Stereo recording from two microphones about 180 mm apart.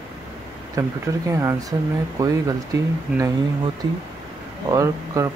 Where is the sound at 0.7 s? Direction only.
15° right (ahead or behind).